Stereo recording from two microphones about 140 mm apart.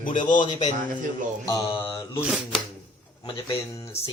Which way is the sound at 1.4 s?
20° left (ahead or behind).